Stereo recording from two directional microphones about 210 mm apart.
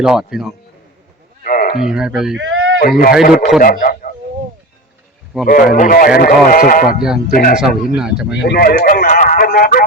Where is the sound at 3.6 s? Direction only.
40° left (ahead or behind).